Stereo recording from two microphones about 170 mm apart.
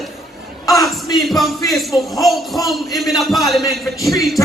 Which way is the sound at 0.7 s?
20° left (ahead or behind).